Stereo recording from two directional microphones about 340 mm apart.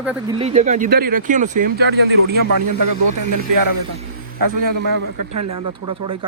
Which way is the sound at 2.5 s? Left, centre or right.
Right.